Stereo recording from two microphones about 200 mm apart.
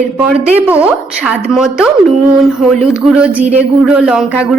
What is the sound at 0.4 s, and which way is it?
A woman's voice, 10° right (ahead or behind).